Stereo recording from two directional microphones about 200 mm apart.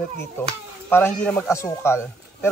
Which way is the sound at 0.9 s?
10° left (ahead or behind).